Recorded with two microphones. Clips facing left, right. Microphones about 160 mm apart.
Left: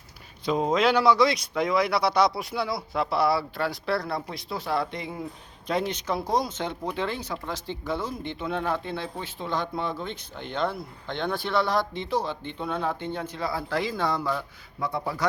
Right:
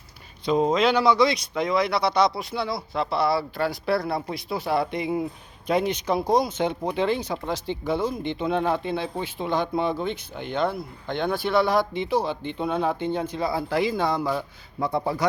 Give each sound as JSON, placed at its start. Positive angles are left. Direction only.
{"t": 0.4, "sound": "speech", "side_deg": 5}
{"t": 14.3, "sound": "speech", "side_deg": -25}